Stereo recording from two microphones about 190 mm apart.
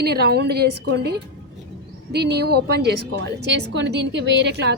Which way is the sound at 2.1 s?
60° right (ahead or behind).